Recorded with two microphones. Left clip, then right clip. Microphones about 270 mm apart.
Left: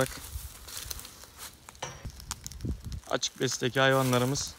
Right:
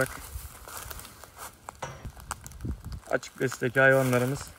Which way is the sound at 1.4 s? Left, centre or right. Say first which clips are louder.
Right 2 dB; centre.